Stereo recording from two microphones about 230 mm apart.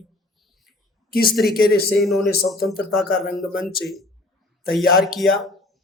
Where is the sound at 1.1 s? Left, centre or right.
Left.